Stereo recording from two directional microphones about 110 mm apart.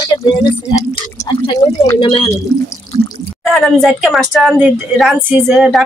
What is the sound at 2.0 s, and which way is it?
Speech, 50° left (ahead or behind).